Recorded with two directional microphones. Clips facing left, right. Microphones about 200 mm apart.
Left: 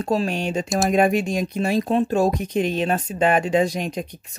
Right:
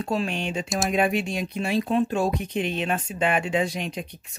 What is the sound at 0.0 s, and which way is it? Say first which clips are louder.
Speech: left 4 dB; 40° left (ahead or behind).